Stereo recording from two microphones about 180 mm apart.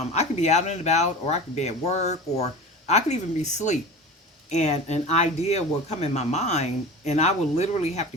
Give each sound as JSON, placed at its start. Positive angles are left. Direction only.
{"t": 0.1, "sound": "speech", "side_deg": 40}